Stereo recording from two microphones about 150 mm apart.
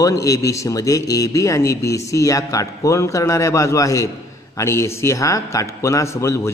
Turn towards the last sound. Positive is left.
turn(degrees=20)  # may be behind; listen again after turning